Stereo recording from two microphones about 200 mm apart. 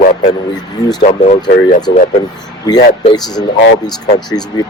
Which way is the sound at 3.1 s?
20° left (ahead or behind).